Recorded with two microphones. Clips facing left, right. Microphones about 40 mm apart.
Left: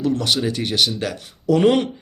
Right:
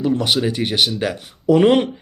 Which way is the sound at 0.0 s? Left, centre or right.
Centre.